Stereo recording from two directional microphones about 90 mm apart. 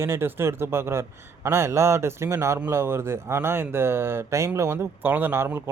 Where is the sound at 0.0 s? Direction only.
25° right (ahead or behind).